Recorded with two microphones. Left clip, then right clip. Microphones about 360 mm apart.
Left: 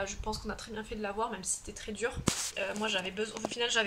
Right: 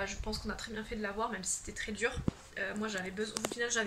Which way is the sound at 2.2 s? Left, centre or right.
Left.